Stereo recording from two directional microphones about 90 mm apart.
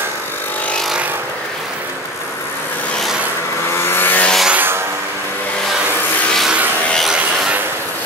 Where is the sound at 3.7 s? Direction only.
25° left (ahead or behind).